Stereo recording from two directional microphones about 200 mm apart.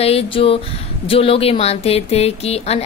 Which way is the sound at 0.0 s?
30° left (ahead or behind).